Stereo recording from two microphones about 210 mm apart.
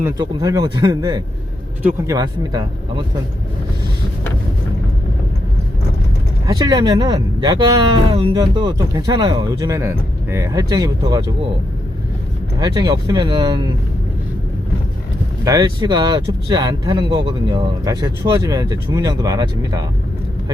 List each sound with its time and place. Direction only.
0.0 s speech: 20° right (ahead or behind)
6.4 s speech: 15° right (ahead or behind)
12.5 s speech: 20° right (ahead or behind)
15.4 s speech: 20° right (ahead or behind)